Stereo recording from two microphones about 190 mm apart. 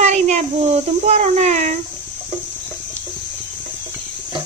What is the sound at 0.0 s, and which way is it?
Child singing, 35° right (ahead or behind).